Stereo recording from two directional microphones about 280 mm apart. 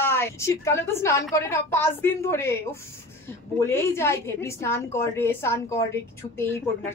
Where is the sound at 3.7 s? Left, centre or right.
Centre.